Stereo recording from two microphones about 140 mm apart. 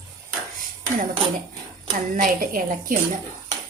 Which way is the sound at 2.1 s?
70° right (ahead or behind).